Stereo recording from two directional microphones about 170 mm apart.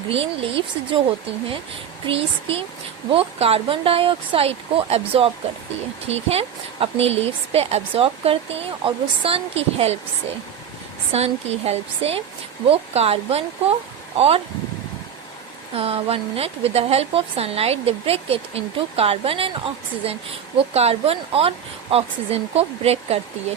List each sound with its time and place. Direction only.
0.1 s speech: 35° right (ahead or behind)
2.0 s speech: 35° right (ahead or behind)
11.1 s speech: 40° right (ahead or behind)
15.7 s speech: 35° right (ahead or behind)